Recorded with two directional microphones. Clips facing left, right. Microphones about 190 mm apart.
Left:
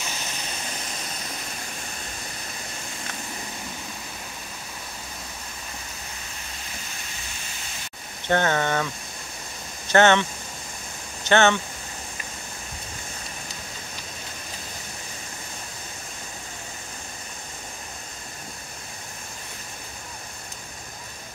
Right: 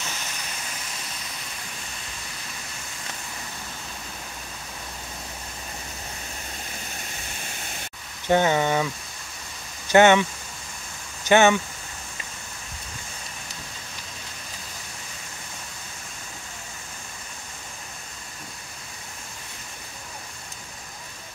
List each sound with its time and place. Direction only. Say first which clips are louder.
8.3 s speech: right 2 dB; 15° right (ahead or behind)
9.8 s speech: right 2 dB; 15° right (ahead or behind)
11.2 s speech: right 2 dB; 15° right (ahead or behind)